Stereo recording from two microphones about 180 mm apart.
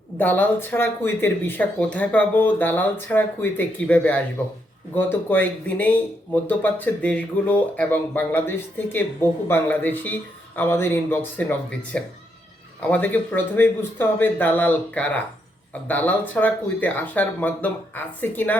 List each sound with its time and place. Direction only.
0.2 s speech: 10° left (ahead or behind)